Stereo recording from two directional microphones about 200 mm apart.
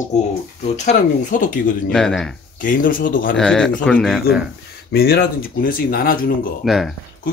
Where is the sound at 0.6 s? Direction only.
35° left (ahead or behind).